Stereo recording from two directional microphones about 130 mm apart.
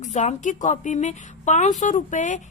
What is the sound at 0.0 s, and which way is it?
Speech, 65° left (ahead or behind).